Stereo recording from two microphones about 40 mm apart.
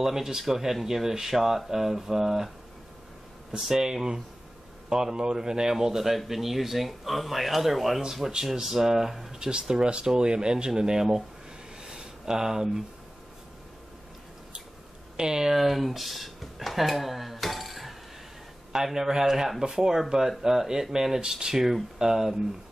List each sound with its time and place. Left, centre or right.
0.0 s speech: centre
3.5 s speech: centre
9.4 s speech: centre
11.8 s a sound: centre
15.1 s speech: centre
18.9 s speech: centre